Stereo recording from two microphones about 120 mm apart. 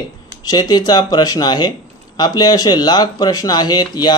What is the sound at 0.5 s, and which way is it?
Speech, 35° left (ahead or behind).